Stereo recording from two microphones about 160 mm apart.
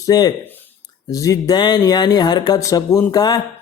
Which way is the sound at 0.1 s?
25° left (ahead or behind).